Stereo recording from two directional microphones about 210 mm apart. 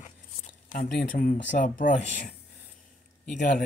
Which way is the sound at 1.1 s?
40° left (ahead or behind).